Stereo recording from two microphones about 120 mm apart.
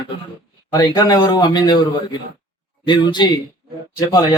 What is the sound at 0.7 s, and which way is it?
Speech, 30° left (ahead or behind).